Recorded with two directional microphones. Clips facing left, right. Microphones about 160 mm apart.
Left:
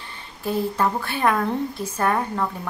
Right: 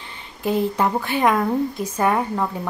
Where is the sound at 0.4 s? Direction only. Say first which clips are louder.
Right 2 dB; 15° right (ahead or behind).